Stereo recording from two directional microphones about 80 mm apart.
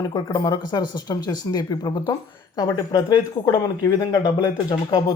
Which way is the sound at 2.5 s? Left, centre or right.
Left.